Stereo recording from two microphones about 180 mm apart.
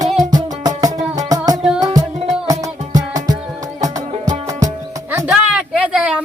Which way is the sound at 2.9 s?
20° right (ahead or behind).